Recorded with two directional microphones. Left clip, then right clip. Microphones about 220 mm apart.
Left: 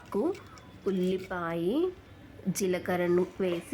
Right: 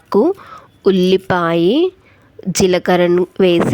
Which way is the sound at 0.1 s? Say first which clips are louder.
Right 17 dB; 30° right (ahead or behind).